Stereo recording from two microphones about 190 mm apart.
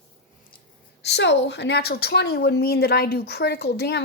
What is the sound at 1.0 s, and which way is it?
A woman's voice, 65° left (ahead or behind).